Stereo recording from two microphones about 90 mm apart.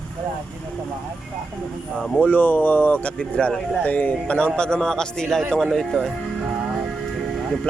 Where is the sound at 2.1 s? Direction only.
15° left (ahead or behind).